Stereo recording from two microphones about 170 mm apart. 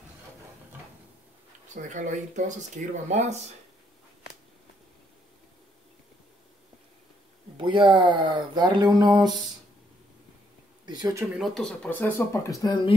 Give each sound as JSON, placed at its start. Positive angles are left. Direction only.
{"t": 1.8, "sound": "speech", "side_deg": -45}
{"t": 7.5, "sound": "speech", "side_deg": -30}
{"t": 10.9, "sound": "speech", "side_deg": -20}
{"t": 11.3, "sound": "speech", "side_deg": 0}